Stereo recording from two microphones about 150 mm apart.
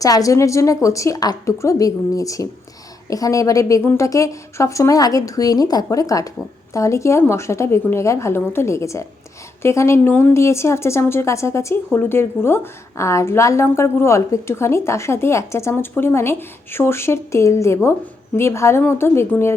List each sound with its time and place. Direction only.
0.0 s a woman's voice: 25° left (ahead or behind)